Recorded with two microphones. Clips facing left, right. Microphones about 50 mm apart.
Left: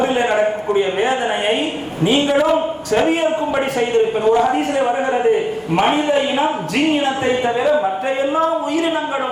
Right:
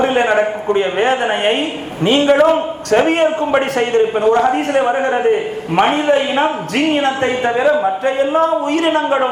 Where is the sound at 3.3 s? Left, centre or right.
Right.